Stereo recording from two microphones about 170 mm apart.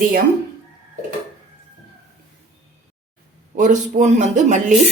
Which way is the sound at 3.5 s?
45° right (ahead or behind).